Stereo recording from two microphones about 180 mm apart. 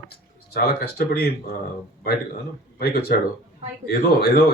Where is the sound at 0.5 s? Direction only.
60° left (ahead or behind).